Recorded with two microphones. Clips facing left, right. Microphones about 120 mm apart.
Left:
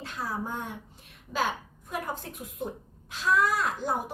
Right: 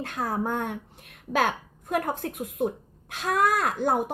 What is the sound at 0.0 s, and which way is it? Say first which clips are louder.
Speech: right 6 dB; 55° right (ahead or behind).